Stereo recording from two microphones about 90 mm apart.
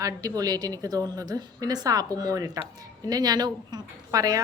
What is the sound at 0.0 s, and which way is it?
A woman's voice, 40° right (ahead or behind).